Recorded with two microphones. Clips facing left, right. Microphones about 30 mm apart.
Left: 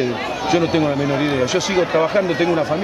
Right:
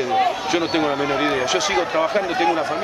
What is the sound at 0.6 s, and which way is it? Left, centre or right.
Speech, centre.